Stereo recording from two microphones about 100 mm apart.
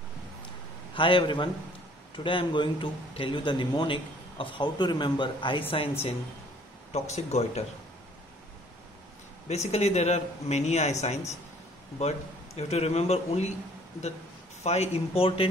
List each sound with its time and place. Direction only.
0.9 s a man's voice: 55° left (ahead or behind)
6.9 s speech: 90° left
9.5 s speech: 90° left
14.6 s speech: 90° left; by 15.5 s 70° left (ahead or behind)